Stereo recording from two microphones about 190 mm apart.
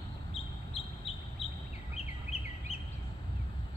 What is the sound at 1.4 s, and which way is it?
Duck, 30° left (ahead or behind).